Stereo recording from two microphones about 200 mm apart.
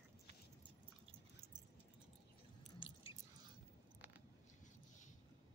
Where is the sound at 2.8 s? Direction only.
25° left (ahead or behind).